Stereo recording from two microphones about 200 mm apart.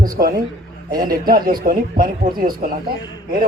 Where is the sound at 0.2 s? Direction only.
45° right (ahead or behind).